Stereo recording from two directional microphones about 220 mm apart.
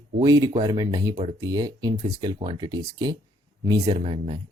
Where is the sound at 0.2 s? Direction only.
15° right (ahead or behind).